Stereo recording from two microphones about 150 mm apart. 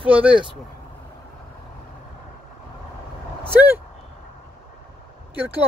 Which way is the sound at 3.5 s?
15° right (ahead or behind).